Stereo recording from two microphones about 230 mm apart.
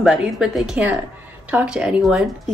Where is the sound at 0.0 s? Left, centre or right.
Centre.